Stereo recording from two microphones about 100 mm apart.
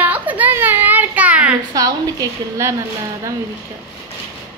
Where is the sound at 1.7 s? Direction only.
40° right (ahead or behind).